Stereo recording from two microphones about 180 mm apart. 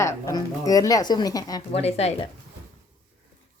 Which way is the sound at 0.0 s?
20° left (ahead or behind).